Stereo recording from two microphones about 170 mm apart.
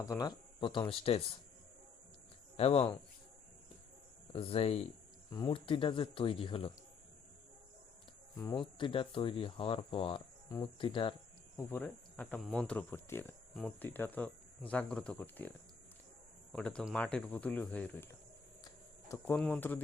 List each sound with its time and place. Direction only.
0.0 s speech: 20° left (ahead or behind)
2.6 s speech: 35° left (ahead or behind)
4.3 s speech: 35° left (ahead or behind)
5.3 s speech: 25° left (ahead or behind)
8.4 s speech: 25° left (ahead or behind)
11.5 s speech: 10° left (ahead or behind)
18.6 s a sound: 20° left (ahead or behind)
19.4 s speech: 10° left (ahead or behind)